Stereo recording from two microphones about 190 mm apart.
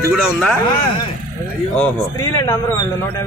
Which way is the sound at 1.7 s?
5° left (ahead or behind).